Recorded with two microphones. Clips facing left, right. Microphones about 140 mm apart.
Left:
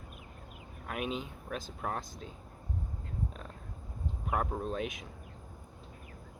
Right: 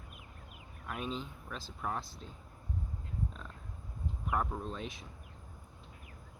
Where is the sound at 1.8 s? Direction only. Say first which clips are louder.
Even; 50° left (ahead or behind).